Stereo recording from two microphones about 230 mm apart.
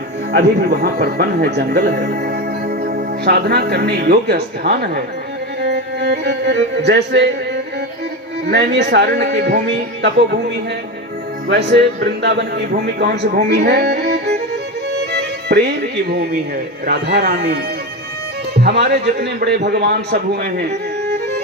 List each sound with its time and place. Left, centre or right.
0.3 s a man's voice: right
18.6 s a man's voice: right